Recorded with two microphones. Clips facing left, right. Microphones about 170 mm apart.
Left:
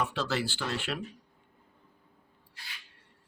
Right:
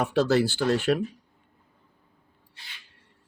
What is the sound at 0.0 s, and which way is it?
Speech, 45° right (ahead or behind).